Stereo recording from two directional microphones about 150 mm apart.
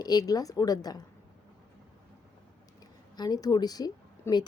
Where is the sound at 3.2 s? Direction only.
25° left (ahead or behind).